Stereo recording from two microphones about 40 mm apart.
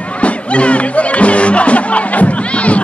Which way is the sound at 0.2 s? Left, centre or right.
Left.